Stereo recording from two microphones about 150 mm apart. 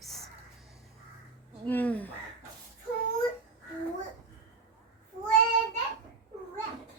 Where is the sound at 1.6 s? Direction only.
10° left (ahead or behind).